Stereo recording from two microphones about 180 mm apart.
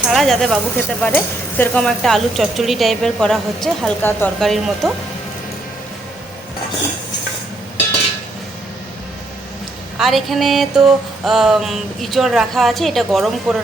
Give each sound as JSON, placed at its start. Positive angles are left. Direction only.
{"t": 0.1, "sound": "stir", "side_deg": 0}
{"t": 10.0, "sound": "stir", "side_deg": 0}